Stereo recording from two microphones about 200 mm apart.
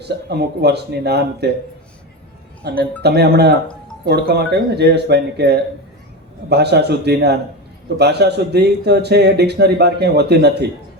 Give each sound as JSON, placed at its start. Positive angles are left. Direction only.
{"t": 0.0, "sound": "a man's voice", "side_deg": -55}
{"t": 2.6, "sound": "a man's voice", "side_deg": -55}